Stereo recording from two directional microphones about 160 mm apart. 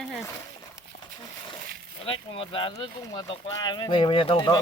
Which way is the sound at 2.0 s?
35° left (ahead or behind).